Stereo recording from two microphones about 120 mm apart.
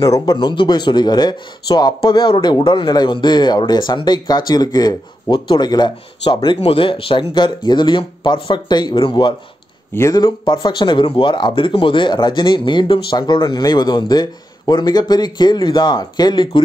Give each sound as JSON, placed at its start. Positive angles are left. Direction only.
{"t": 0.0, "sound": "speech", "side_deg": 30}
{"t": 9.9, "sound": "speech", "side_deg": 30}